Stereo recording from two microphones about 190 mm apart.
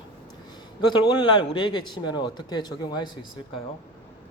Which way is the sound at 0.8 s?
20° left (ahead or behind).